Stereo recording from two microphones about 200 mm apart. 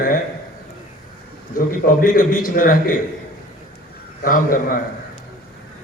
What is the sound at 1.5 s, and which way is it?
A man's voice, 45° left (ahead or behind).